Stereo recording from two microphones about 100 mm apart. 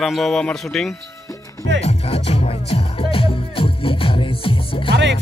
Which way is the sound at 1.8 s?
90° left.